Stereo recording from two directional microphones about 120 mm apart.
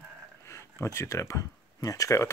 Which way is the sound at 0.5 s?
25° left (ahead or behind).